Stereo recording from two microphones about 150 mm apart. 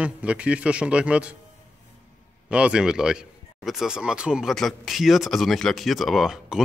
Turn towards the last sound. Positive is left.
turn(degrees=-5)  # may be behind; listen again after turning